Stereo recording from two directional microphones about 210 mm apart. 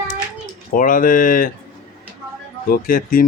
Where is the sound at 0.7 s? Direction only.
40° left (ahead or behind).